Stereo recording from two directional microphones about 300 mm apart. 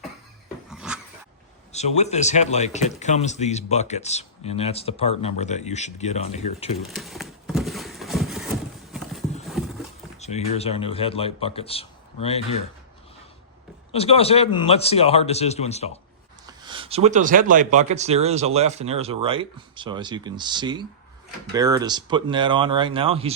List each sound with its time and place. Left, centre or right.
0.7 s dog: centre
1.7 s speech: left
6.7 s a sound: centre
8.9 s clip-clop: centre
10.2 s a sound: left
10.6 s speech: centre
13.9 s speech: centre
16.5 s speech: centre